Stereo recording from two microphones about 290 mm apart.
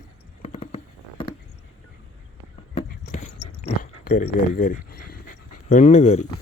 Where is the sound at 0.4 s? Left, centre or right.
Left.